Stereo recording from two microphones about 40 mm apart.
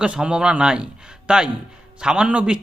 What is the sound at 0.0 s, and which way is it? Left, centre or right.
A man's voice, right.